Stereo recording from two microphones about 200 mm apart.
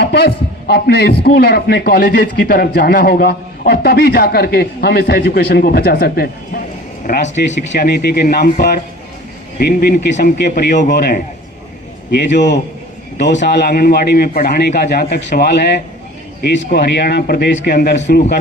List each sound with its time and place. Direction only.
0.0 s a man's voice: 55° left (ahead or behind)
7.3 s a man's voice: 60° left (ahead or behind)